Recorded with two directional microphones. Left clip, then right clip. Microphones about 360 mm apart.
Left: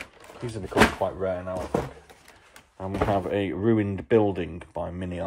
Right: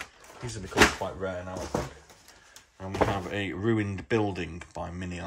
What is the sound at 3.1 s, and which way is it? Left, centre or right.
Speech, centre.